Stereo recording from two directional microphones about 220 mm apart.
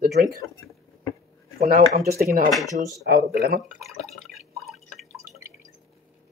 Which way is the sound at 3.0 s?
45° right (ahead or behind).